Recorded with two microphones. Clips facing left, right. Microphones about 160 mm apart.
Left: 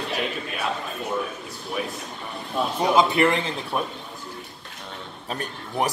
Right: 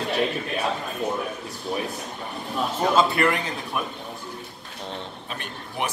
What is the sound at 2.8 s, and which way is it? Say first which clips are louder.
A man's voice: left 1 dB; 15° left (ahead or behind).